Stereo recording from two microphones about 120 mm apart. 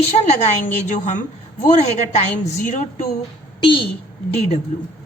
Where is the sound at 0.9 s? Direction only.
90° left.